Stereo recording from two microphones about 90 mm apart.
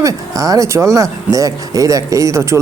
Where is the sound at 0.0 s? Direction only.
40° right (ahead or behind).